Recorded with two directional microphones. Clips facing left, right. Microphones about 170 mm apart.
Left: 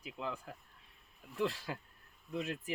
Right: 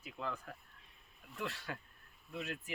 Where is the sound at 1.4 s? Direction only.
35° left (ahead or behind).